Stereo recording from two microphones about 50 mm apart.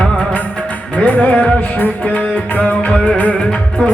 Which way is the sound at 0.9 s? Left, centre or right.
Left.